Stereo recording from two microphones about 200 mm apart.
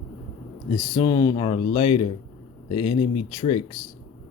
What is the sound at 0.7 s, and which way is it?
Speech, 20° left (ahead or behind).